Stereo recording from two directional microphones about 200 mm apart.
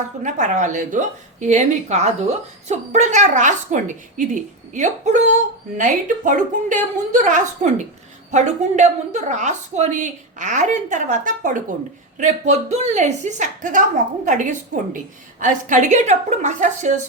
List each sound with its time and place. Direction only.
0.2 s a woman's voice: 40° right (ahead or behind)